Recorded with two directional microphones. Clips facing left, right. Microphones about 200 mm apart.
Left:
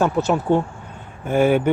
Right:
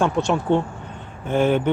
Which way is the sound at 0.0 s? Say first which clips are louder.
Left 1 dB; 5° left (ahead or behind).